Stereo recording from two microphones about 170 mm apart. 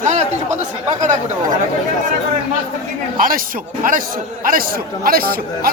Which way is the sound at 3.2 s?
55° right (ahead or behind).